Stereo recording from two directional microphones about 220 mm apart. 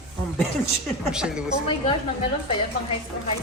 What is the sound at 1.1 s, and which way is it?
Speech, 5° right (ahead or behind).